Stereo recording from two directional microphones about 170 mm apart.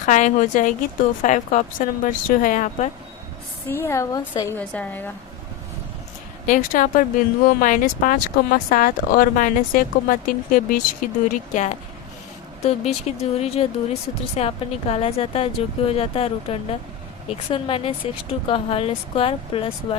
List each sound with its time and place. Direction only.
0.0 s speech: 45° left (ahead or behind)
3.7 s a woman's voice: 15° left (ahead or behind)
4.5 s a woman's voice: 10° left (ahead or behind)
6.4 s speech: 50° left (ahead or behind); by 20.0 s 35° left (ahead or behind)